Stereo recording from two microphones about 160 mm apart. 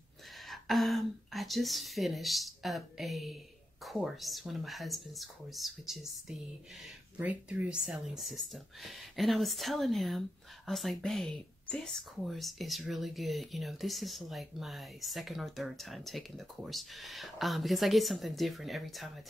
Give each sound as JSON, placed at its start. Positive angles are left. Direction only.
{"t": 0.5, "sound": "speech", "side_deg": 0}